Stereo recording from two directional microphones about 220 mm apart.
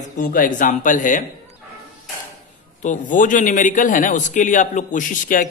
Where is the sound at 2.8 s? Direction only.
35° left (ahead or behind).